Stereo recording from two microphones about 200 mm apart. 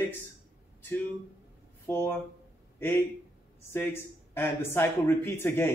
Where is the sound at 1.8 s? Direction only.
10° left (ahead or behind).